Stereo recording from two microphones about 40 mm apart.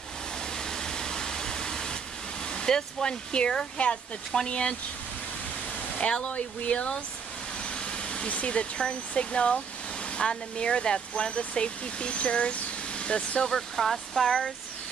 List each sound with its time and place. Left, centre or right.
0.6 s pink noise: centre
2.4 s speech: centre
5.9 s speech: left
7.6 s vehicle: left
8.3 s speech: left
13.5 s speech: centre